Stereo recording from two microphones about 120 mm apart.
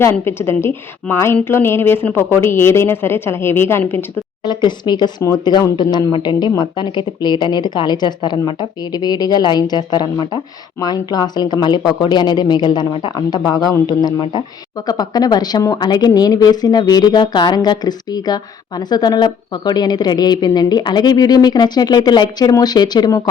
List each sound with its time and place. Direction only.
0.0 s a woman's voice: 20° left (ahead or behind)
4.4 s a woman's voice: 40° left (ahead or behind)